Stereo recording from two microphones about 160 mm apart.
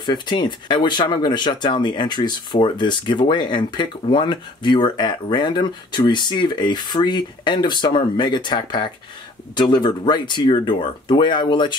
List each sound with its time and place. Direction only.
0.0 s speech: 30° left (ahead or behind)